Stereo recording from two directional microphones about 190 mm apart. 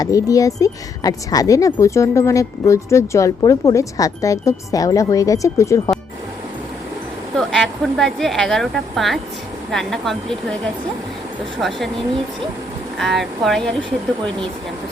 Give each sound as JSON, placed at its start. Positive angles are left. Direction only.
{"t": 0.0, "sound": "speech", "side_deg": 15}
{"t": 7.3, "sound": "a woman's voice", "side_deg": 0}
{"t": 13.0, "sound": "a woman's voice", "side_deg": 0}